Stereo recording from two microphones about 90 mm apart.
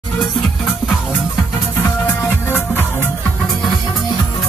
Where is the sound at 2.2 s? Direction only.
25° left (ahead or behind).